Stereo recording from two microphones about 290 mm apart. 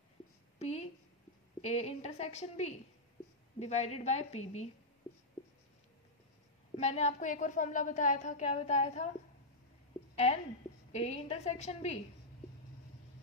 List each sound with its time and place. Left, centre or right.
0.6 s a woman's voice: left
6.8 s a woman's voice: left
10.1 s a woman's voice: left